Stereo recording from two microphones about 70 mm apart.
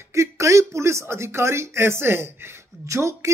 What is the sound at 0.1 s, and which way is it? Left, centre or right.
Speech, right.